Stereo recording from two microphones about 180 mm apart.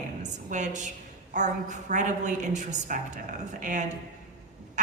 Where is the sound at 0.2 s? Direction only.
40° right (ahead or behind).